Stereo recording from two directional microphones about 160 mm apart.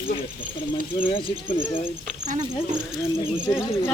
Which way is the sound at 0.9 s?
35° left (ahead or behind).